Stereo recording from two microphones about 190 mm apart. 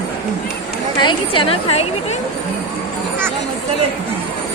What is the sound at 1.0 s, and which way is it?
A woman's voice, 25° left (ahead or behind).